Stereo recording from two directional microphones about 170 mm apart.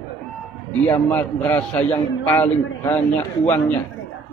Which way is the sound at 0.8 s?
10° left (ahead or behind).